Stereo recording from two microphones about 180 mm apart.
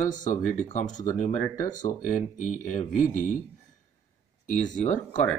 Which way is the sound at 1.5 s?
20° left (ahead or behind).